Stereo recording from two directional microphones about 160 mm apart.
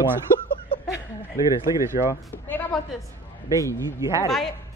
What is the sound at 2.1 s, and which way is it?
Speech, 10° left (ahead or behind).